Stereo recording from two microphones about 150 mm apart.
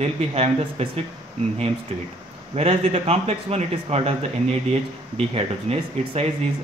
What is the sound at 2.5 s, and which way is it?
A man's voice, 45° right (ahead or behind).